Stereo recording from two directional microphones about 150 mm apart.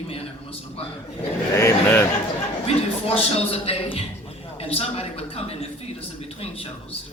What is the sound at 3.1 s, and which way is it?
A man's voice, 40° left (ahead or behind).